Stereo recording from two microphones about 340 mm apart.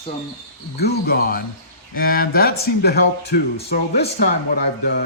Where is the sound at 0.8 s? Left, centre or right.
Left.